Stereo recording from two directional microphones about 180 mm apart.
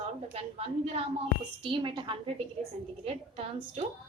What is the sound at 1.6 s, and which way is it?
A woman's voice, 30° right (ahead or behind).